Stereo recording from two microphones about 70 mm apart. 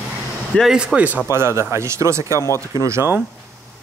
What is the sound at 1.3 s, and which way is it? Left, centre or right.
Speech, right.